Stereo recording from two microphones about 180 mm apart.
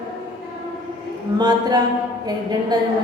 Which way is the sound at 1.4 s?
20° right (ahead or behind).